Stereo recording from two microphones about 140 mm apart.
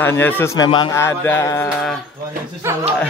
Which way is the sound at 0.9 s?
20° left (ahead or behind).